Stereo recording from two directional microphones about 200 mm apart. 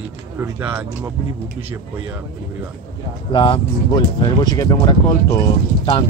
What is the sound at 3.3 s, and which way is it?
Speech, 25° left (ahead or behind).